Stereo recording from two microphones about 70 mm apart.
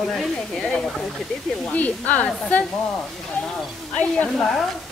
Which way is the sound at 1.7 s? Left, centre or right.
Left.